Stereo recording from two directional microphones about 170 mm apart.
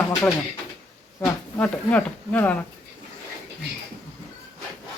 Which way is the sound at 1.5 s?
10° left (ahead or behind).